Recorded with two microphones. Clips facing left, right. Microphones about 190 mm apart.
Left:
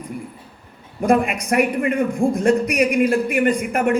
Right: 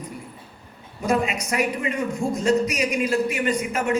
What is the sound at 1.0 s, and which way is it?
A man's voice, 55° left (ahead or behind).